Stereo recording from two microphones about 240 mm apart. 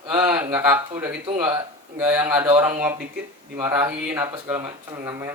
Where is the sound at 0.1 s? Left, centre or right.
Centre.